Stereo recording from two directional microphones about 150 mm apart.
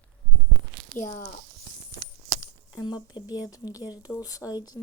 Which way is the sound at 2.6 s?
30° left (ahead or behind).